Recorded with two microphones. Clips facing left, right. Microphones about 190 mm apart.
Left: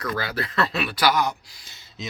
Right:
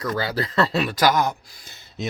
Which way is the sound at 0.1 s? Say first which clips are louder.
Right 4 dB; 35° right (ahead or behind).